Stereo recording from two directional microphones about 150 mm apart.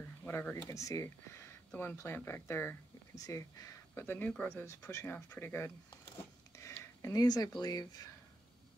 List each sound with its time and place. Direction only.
0.2 s speech: 10° left (ahead or behind)